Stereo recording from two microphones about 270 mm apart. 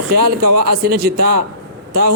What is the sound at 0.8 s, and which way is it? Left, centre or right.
Speech, right.